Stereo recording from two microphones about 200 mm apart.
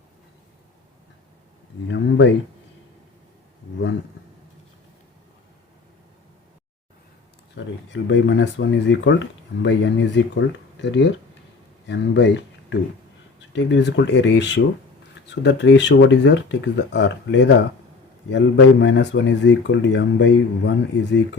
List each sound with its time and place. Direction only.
1.9 s speech: 65° left (ahead or behind)
7.6 s speech: 60° left (ahead or behind)